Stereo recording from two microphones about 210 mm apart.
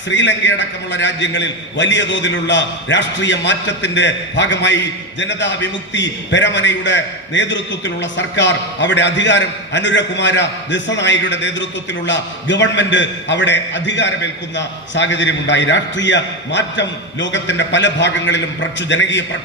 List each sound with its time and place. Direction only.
0.1 s a man's voice: 60° left (ahead or behind)